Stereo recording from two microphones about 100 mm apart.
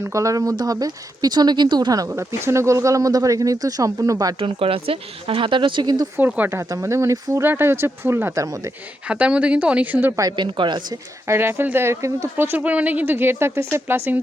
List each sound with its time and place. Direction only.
0.0 s speech: 30° right (ahead or behind)
2.0 s speech: 25° right (ahead or behind)
4.4 s speech: 65° right (ahead or behind); by 6.1 s 45° right (ahead or behind)
6.1 s speech: 15° right (ahead or behind)
6.6 s speech: 35° right (ahead or behind)
9.0 s speech: 10° right (ahead or behind)
10.3 s speech: 50° right (ahead or behind)
11.3 s speech: 25° right (ahead or behind)